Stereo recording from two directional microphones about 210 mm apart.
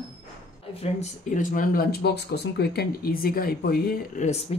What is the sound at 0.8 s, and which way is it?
Speech, 35° left (ahead or behind).